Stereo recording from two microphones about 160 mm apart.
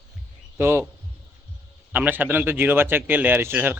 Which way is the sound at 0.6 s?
15° right (ahead or behind).